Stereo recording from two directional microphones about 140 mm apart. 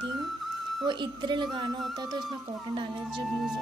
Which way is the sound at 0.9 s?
35° right (ahead or behind).